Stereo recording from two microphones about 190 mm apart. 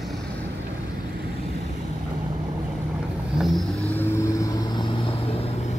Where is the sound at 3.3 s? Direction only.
Centre (ahead or behind).